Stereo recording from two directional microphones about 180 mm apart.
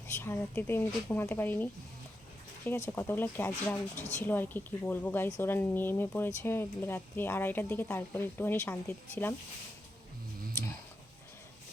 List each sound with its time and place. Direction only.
0.1 s speech: 15° left (ahead or behind)